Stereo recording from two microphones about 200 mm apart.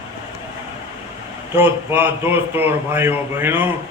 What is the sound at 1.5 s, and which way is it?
A man's voice, 10° right (ahead or behind).